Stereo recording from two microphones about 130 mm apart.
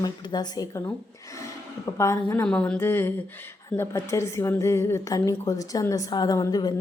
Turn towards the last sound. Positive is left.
turn(degrees=30)  # may be behind; listen again after turning